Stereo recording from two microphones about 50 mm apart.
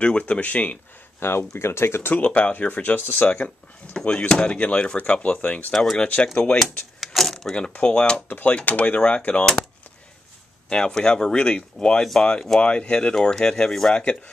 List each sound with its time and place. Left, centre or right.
0.0 s speech: left
1.2 s speech: left
2.1 s speech: left
4.1 s speech: centre
7.1 s a sound: centre
7.7 s speech: left
8.3 s speech: left
10.7 s speech: centre
13.9 s speech: left